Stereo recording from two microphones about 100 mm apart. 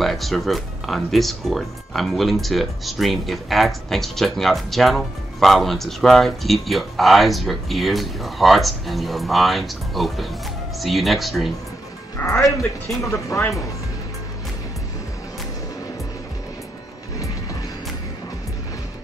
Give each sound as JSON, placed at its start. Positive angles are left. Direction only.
{"t": 0.0, "sound": "speech", "side_deg": 0}
{"t": 12.2, "sound": "speech", "side_deg": 20}
{"t": 12.5, "sound": "speech", "side_deg": 30}